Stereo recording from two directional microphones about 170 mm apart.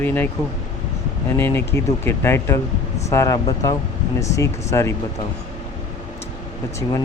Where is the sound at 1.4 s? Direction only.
15° left (ahead or behind).